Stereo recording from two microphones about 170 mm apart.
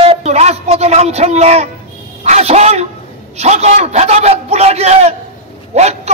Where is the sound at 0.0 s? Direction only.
35° right (ahead or behind).